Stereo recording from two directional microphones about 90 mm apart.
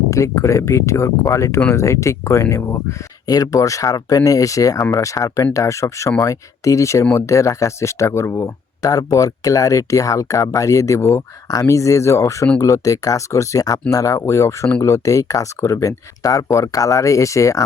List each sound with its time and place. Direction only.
0.1 s speech: 35° left (ahead or behind)
3.2 s speech: 40° left (ahead or behind)